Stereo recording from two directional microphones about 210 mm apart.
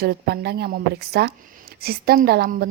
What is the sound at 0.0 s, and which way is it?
Speech, 50° right (ahead or behind).